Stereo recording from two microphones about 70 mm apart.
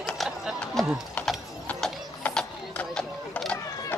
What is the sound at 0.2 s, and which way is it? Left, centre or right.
Run, centre.